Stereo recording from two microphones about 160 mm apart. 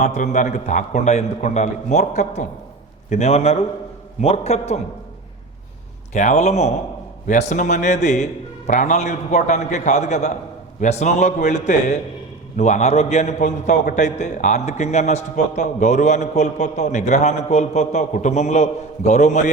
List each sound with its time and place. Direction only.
0.0 s a man's voice: 45° left (ahead or behind)
6.1 s a man's voice: 45° left (ahead or behind)